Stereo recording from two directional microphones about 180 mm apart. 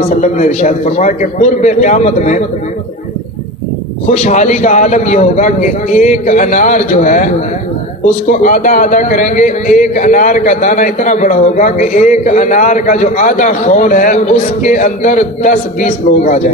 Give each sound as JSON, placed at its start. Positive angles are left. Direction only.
{"t": 0.0, "sound": "a man's voice", "side_deg": 40}
{"t": 4.1, "sound": "a man's voice", "side_deg": 40}